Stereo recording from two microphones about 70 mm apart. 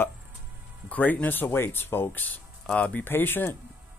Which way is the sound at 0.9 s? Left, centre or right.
Left.